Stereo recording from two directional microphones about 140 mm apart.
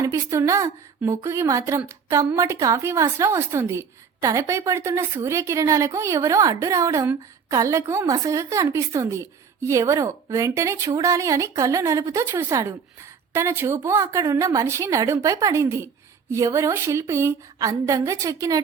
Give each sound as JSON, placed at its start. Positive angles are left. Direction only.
{"t": 0.0, "sound": "a woman's voice", "side_deg": -20}